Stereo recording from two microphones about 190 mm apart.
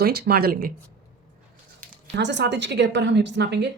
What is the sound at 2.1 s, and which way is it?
A woman's voice, 65° right (ahead or behind).